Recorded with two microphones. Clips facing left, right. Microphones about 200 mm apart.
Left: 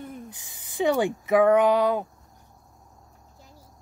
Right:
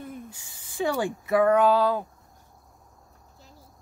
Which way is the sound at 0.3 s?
20° left (ahead or behind).